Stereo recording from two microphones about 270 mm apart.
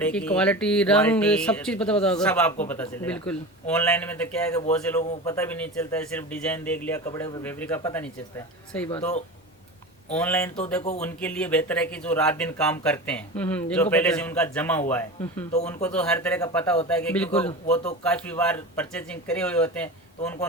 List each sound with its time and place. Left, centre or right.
0.0 s a man's voice: centre